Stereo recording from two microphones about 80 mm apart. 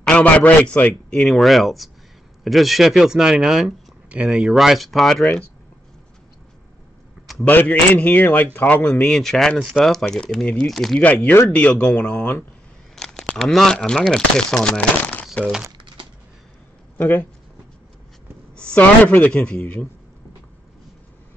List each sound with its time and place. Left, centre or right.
0.0 s a man's voice: centre
1.2 s speech: centre
7.4 s a man's voice: left; by 11.0 s centre
11.0 s speech: centre
12.9 s a sound: centre
13.4 s speech: centre
17.0 s a man's voice: left
18.6 s speech: centre